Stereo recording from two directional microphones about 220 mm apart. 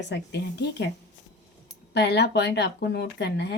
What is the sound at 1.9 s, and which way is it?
Speech, 50° left (ahead or behind).